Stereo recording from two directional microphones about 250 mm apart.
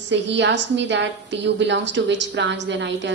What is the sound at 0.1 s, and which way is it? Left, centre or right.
A woman's voice, right.